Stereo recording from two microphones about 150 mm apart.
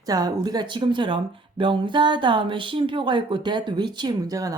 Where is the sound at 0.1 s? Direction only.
25° right (ahead or behind).